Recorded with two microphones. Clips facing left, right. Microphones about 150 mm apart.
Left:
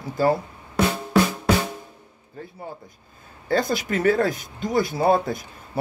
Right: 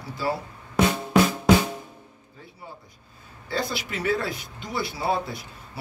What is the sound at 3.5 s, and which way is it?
Speech, 45° left (ahead or behind).